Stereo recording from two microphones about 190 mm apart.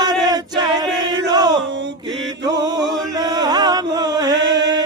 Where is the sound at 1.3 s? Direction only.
20° right (ahead or behind).